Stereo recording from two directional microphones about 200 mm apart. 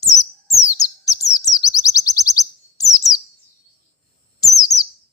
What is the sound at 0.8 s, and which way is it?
Chirp, 20° left (ahead or behind).